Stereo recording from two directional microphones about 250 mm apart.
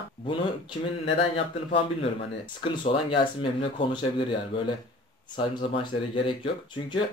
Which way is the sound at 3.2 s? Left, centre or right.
Centre.